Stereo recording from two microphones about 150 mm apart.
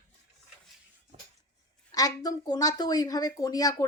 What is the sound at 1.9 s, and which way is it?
A woman's voice, 25° left (ahead or behind).